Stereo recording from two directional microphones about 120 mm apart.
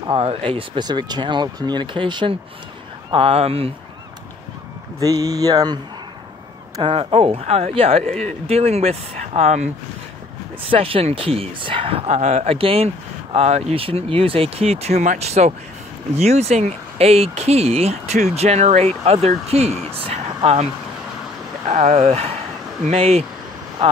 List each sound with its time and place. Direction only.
0.1 s speech: 50° right (ahead or behind)
5.0 s speech: 30° right (ahead or behind)
6.8 s speech: 45° right (ahead or behind)
7.4 s speech: 65° right (ahead or behind)
10.7 s speech: 50° right (ahead or behind)
21.6 s speech: 70° right (ahead or behind)